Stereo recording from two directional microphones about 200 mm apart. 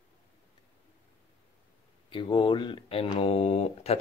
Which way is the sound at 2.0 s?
25° left (ahead or behind).